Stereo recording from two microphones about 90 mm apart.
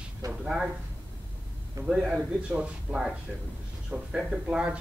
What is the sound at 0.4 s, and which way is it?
Speech, 10° right (ahead or behind).